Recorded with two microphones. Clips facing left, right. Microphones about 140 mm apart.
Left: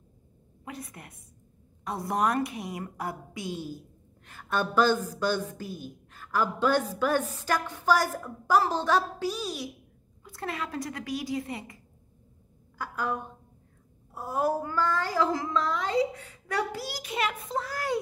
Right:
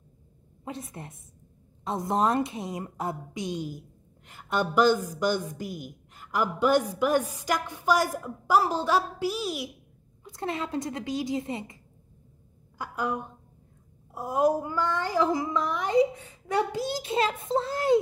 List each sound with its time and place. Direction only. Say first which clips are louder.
0.7 s a woman's voice: right 3 dB; 25° right (ahead or behind)
10.2 s a woman's voice: right 3 dB; 25° right (ahead or behind)